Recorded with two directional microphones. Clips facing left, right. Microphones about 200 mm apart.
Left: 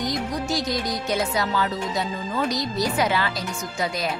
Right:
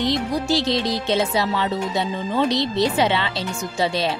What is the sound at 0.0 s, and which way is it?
A woman's voice, 30° right (ahead or behind).